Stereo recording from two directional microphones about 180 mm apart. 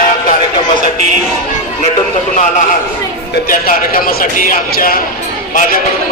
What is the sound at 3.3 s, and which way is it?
A man's voice, 50° left (ahead or behind).